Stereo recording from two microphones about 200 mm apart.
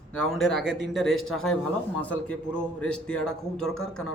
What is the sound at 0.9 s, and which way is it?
A man's voice, centre (ahead or behind).